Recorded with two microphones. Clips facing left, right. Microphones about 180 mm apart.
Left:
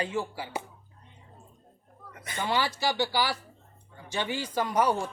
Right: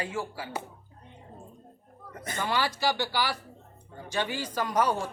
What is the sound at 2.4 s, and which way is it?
Speech, 20° left (ahead or behind).